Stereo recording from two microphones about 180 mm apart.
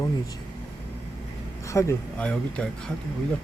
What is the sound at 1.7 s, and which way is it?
Speech, 15° left (ahead or behind).